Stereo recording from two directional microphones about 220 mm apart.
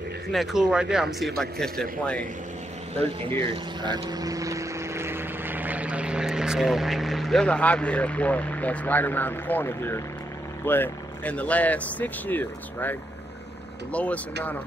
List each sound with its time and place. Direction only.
0.3 s speech: centre (ahead or behind)
3.3 s speech: 20° right (ahead or behind); by 12.9 s 10° left (ahead or behind)
13.9 s speech: 5° left (ahead or behind)